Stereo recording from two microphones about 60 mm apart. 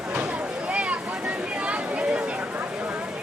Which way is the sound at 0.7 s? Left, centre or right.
Right.